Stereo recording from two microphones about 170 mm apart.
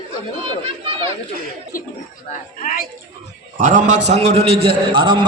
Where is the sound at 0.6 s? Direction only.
35° right (ahead or behind).